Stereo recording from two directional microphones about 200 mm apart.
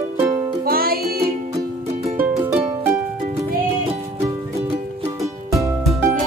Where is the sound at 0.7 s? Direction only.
50° right (ahead or behind).